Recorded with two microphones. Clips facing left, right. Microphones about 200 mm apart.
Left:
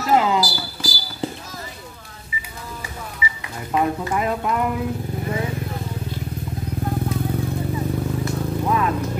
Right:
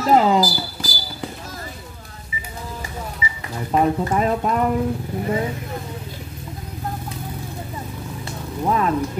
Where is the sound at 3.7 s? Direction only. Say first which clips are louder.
Right 3 dB; 35° right (ahead or behind).